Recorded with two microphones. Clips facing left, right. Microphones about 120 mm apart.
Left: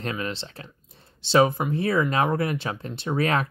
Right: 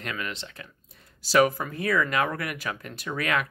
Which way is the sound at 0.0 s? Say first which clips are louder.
Left 4 dB; 30° left (ahead or behind).